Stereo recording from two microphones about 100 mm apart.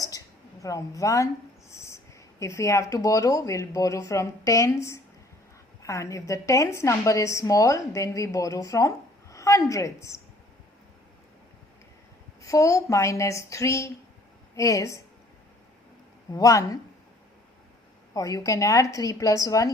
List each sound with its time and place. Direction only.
0.6 s a woman's voice: 35° left (ahead or behind)
1.7 s owl: 30° left (ahead or behind)
2.4 s a woman's voice: 30° left (ahead or behind)
12.4 s a woman's voice: 30° left (ahead or behind)
16.3 s a woman's voice: 35° left (ahead or behind)
18.1 s a woman's voice: 35° left (ahead or behind)